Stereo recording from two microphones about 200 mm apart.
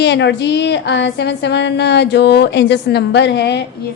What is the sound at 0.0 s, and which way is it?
A woman's voice, 60° left (ahead or behind).